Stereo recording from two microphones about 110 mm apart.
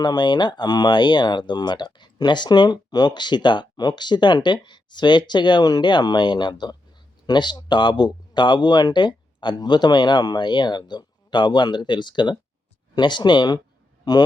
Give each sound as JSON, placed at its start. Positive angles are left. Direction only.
{"t": 0.0, "sound": "a man's voice", "side_deg": 40}